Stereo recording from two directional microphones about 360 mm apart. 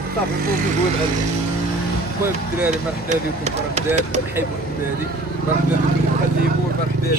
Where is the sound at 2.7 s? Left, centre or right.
Centre.